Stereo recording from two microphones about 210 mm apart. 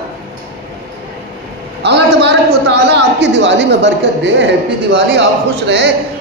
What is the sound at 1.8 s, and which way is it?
A woman's voice, 55° right (ahead or behind).